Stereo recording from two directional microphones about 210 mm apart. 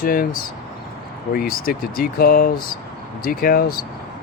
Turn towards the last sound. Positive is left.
turn(degrees=45)  # may be behind; listen again after turning